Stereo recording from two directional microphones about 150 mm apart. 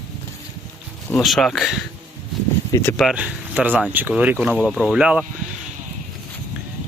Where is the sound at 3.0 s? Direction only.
5° right (ahead or behind).